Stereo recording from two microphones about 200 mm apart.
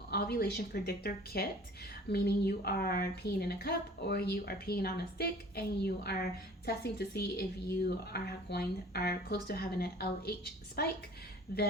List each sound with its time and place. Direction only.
0.1 s speech: 50° left (ahead or behind)